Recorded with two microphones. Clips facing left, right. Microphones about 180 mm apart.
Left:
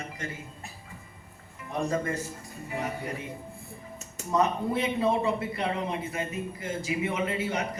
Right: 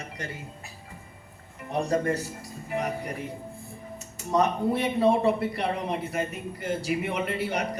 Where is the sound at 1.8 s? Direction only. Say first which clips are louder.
Right 3 dB; 35° right (ahead or behind).